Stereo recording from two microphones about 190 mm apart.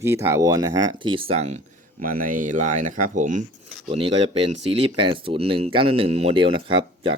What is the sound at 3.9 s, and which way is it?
Speech, 30° right (ahead or behind).